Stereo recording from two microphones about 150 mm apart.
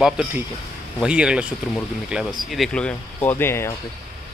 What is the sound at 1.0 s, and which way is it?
Speech, 5° right (ahead or behind).